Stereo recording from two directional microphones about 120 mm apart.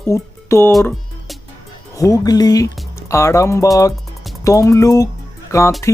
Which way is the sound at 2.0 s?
30° left (ahead or behind).